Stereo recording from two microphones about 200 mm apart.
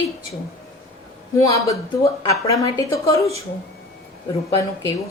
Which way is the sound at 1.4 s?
15° left (ahead or behind).